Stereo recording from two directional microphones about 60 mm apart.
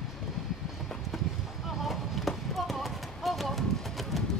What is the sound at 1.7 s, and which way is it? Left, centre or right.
Basketball bounce, centre.